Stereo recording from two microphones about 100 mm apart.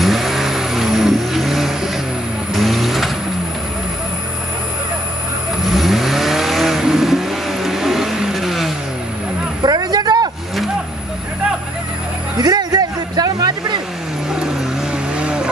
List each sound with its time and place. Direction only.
0.0 s vehicle: centre (ahead or behind)
5.6 s vehicle: centre (ahead or behind)
9.6 s vehicle: 45° right (ahead or behind)
12.4 s a sound: 40° right (ahead or behind)
15.1 s vehicle: 10° right (ahead or behind)